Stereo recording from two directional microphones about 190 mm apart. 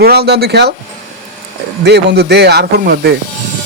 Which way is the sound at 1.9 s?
60° right (ahead or behind).